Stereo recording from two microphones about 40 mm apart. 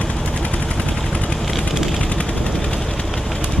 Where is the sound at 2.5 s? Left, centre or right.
Centre.